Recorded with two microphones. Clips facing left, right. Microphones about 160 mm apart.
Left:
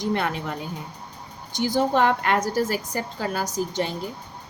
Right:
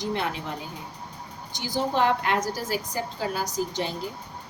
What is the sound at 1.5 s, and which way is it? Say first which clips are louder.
A woman's voice: left 5 dB; 55° left (ahead or behind).